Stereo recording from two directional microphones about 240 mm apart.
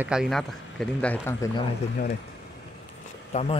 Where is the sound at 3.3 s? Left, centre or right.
Left.